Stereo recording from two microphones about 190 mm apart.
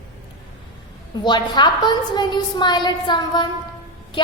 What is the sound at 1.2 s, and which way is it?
A woman's voice, 25° left (ahead or behind).